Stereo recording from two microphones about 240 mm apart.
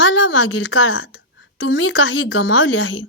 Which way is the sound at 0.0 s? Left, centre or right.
Left.